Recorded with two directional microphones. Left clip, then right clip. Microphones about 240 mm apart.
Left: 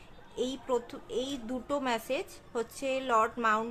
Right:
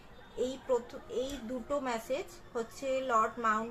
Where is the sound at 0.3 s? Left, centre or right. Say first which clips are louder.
Even; left.